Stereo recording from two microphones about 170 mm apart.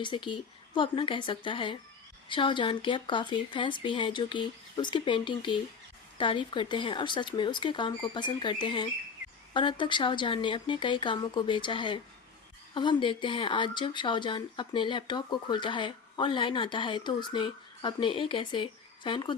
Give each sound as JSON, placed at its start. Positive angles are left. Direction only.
{"t": 0.0, "sound": "speech", "side_deg": 30}